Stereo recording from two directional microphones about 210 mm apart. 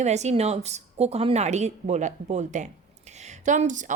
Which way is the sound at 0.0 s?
30° right (ahead or behind).